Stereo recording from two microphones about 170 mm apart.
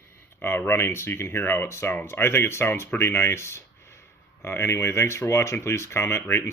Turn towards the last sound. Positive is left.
turn(degrees=15)  # may be behind; listen again after turning